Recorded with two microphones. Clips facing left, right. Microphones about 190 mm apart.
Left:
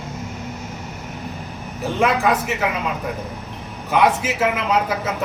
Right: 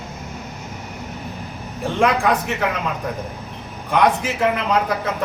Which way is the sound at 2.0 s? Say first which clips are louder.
Right 1 dB; 5° left (ahead or behind).